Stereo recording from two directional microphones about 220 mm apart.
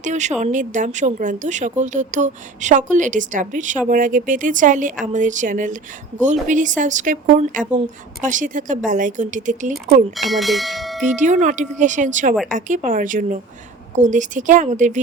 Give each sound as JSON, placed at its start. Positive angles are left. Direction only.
{"t": 0.0, "sound": "speech", "side_deg": -35}
{"t": 10.2, "sound": "speech", "side_deg": 0}
{"t": 11.0, "sound": "speech", "side_deg": -35}